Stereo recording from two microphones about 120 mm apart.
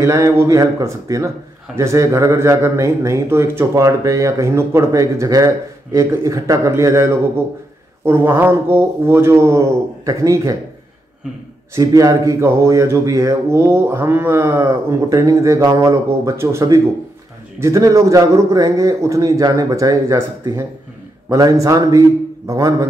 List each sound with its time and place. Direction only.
0.0 s speech: 25° right (ahead or behind)
11.7 s speech: 30° right (ahead or behind)